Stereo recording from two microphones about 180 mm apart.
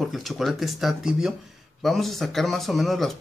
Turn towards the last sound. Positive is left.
turn(degrees=0)  # may be behind; listen again after turning